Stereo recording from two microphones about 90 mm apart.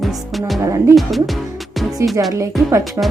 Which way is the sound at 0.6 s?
35° right (ahead or behind).